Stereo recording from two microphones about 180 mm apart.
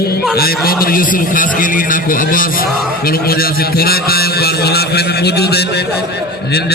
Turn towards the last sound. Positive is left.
turn(degrees=65)  # may be behind; listen again after turning